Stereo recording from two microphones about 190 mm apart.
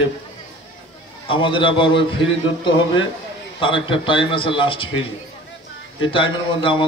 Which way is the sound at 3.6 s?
25° left (ahead or behind).